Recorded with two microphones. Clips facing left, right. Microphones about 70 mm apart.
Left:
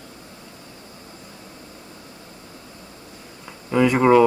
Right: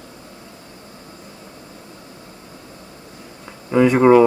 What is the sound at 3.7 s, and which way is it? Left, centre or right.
Speech, right.